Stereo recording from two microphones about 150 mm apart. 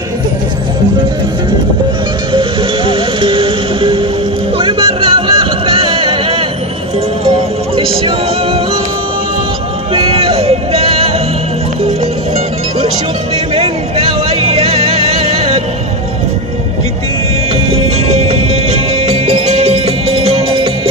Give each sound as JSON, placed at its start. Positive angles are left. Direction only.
{"t": 2.9, "sound": "music", "side_deg": -35}
{"t": 7.7, "sound": "music", "side_deg": -35}
{"t": 9.9, "sound": "a sound", "side_deg": -40}
{"t": 13.6, "sound": "music", "side_deg": -40}
{"t": 18.0, "sound": "music", "side_deg": -45}